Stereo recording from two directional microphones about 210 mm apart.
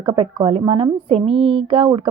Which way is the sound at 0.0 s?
25° right (ahead or behind).